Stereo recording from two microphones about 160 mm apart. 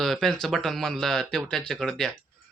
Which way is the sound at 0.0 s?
Centre (ahead or behind).